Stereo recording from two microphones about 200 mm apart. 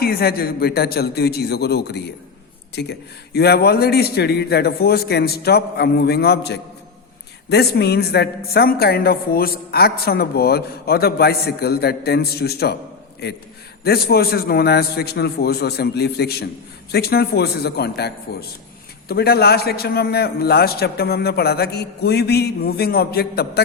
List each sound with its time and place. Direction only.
0.0 s a man's voice: 50° left (ahead or behind)